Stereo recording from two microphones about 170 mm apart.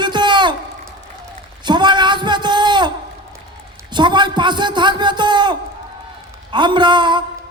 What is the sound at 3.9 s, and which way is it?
A man's voice, 25° right (ahead or behind).